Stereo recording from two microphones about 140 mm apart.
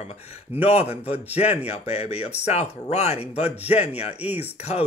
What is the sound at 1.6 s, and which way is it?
Speech, 50° left (ahead or behind).